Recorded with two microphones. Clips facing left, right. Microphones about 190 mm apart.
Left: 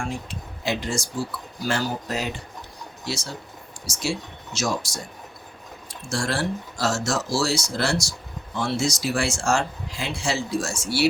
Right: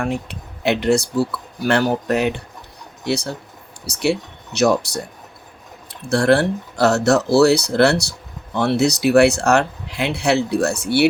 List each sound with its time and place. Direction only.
0.0 s speech: 65° right (ahead or behind)